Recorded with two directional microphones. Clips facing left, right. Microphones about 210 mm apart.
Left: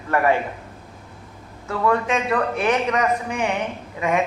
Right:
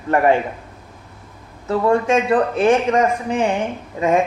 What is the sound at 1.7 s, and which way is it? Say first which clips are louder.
A woman's voice: right 5 dB; 25° right (ahead or behind).